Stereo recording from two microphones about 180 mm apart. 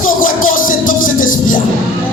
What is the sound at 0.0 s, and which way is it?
Music, 50° left (ahead or behind).